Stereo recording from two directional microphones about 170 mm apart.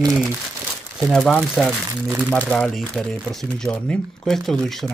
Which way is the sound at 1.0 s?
5° left (ahead or behind).